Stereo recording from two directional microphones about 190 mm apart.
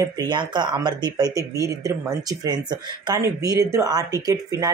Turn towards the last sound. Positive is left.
turn(degrees=-20)  # may be behind; listen again after turning